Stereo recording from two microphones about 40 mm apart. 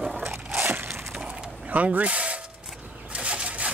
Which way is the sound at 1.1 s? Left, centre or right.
Right.